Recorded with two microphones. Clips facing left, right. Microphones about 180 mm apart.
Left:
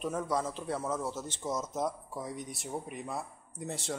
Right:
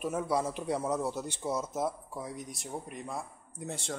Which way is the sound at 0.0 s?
10° right (ahead or behind).